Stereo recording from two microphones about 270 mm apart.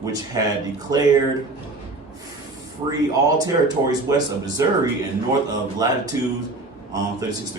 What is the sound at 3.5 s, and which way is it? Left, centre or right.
Speech, centre.